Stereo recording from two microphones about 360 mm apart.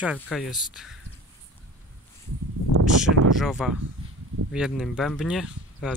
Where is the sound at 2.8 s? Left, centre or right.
Centre.